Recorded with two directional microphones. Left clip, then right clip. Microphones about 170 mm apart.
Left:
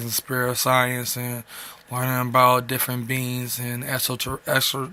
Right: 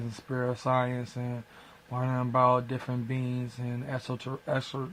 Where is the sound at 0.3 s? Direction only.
25° left (ahead or behind).